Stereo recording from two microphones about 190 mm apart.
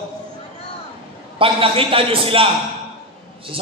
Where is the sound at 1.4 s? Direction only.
30° right (ahead or behind).